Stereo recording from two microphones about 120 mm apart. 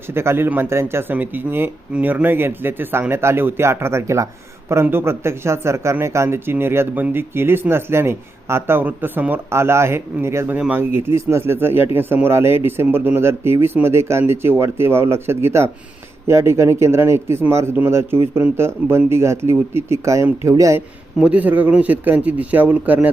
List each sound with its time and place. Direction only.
0.1 s speech: 20° right (ahead or behind)
21.2 s speech: 10° right (ahead or behind)